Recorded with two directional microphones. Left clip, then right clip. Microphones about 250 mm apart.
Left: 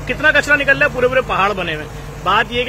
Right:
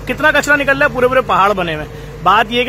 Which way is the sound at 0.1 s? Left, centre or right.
Right.